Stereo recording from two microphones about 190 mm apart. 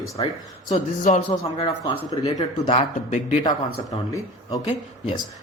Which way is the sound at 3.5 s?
20° left (ahead or behind).